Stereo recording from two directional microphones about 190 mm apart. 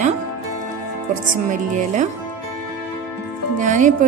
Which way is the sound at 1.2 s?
45° right (ahead or behind).